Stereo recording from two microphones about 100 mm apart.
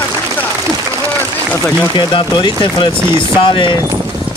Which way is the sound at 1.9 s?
50° left (ahead or behind).